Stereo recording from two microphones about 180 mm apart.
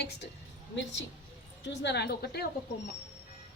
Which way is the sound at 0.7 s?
90° left.